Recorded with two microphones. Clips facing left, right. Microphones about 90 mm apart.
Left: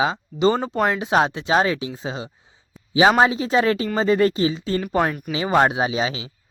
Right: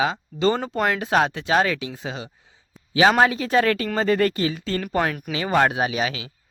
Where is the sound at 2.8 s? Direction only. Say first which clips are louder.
Left 3 dB; centre (ahead or behind).